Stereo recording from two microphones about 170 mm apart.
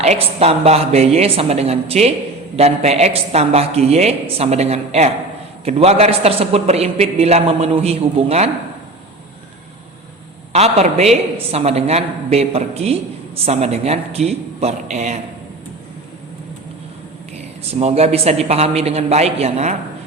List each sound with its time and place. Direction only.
0.0 s a man's voice: 40° right (ahead or behind)
10.5 s a man's voice: 40° right (ahead or behind)
17.7 s a man's voice: 40° right (ahead or behind)